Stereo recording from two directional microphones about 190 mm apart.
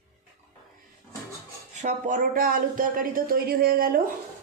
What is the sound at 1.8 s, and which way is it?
Speech, 45° right (ahead or behind).